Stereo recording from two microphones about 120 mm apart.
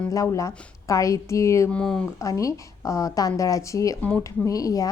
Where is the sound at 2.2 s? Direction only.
25° left (ahead or behind).